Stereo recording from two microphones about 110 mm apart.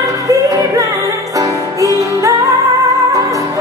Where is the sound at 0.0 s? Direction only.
30° right (ahead or behind).